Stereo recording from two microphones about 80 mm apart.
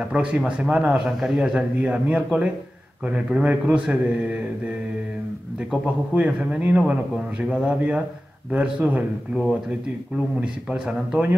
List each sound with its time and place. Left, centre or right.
0.0 s a man's voice: centre
5.7 s a man's voice: centre
10.4 s a man's voice: centre